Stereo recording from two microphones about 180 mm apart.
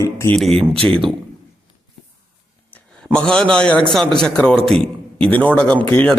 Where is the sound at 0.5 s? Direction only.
30° right (ahead or behind).